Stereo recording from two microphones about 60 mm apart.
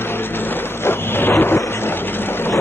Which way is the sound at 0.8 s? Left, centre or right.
Left.